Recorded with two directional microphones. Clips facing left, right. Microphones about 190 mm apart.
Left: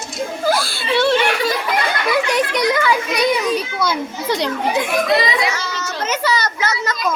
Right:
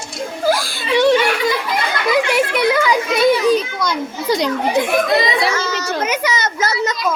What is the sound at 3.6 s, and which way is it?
Children playing, 5° left (ahead or behind).